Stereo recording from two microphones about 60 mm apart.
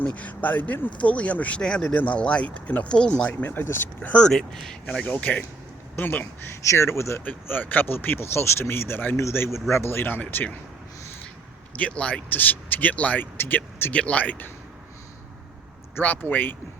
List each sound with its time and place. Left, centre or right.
0.0 s speech: left
1.6 s speech: centre
1.9 s speech: left
3.4 s speech: left
4.2 s speech: centre
5.0 s speech: left
6.6 s speech: left
7.4 s speech: left
11.8 s speech: left
12.3 s speech: left
13.3 s speech: left
13.9 s speech: left
16.0 s speech: left